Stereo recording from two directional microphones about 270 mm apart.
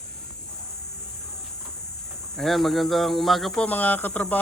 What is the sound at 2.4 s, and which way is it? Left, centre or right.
Speech, centre.